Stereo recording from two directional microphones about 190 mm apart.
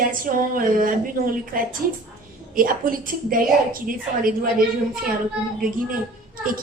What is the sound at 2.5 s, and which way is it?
Speech, 45° right (ahead or behind).